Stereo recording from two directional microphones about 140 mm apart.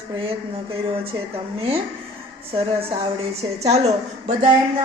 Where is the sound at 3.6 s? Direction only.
50° right (ahead or behind).